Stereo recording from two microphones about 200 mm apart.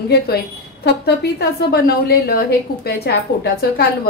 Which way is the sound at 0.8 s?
55° left (ahead or behind).